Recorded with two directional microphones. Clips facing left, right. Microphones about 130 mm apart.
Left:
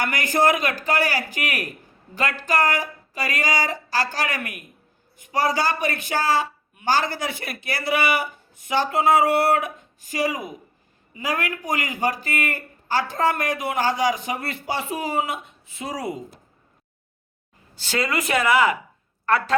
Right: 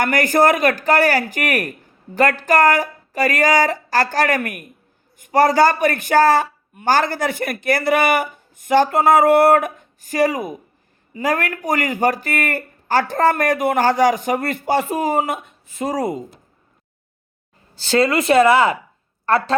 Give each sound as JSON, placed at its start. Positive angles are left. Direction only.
{"t": 0.0, "sound": "a woman's voice", "side_deg": -50}
{"t": 17.7, "sound": "a woman's voice", "side_deg": -30}